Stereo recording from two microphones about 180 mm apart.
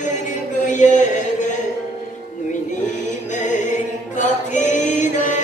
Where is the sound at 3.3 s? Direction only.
45° left (ahead or behind).